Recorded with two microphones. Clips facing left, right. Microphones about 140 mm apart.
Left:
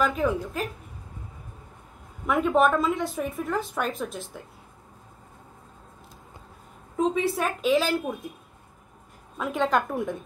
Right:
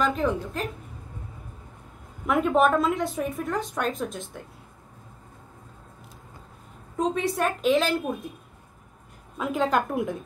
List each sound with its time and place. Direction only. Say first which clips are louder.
0.0 s a woman's voice: even; 5° left (ahead or behind)
2.2 s a woman's voice: even; centre (ahead or behind)
7.0 s a woman's voice: left 1 dB; centre (ahead or behind)
9.4 s a woman's voice: even; centre (ahead or behind)